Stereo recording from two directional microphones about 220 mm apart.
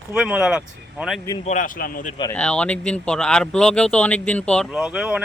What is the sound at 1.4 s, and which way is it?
Speech, 35° left (ahead or behind).